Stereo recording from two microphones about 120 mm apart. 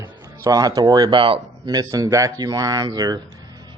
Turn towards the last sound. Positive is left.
turn(degrees=-35)  # may be behind; listen again after turning